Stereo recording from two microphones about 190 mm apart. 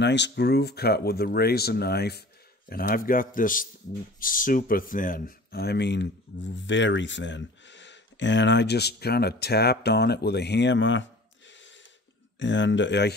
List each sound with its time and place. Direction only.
0.0 s a man's voice: 65° left (ahead or behind)